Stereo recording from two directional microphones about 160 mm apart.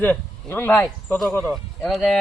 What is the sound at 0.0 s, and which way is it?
A man's voice, 10° left (ahead or behind).